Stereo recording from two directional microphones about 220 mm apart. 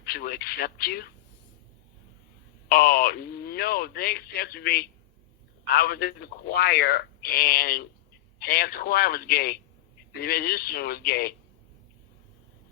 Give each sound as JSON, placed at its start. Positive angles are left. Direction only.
{"t": 0.0, "sound": "speech", "side_deg": 45}
{"t": 2.6, "sound": "speech", "side_deg": 45}